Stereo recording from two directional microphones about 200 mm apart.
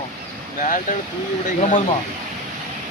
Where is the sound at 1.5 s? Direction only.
40° left (ahead or behind).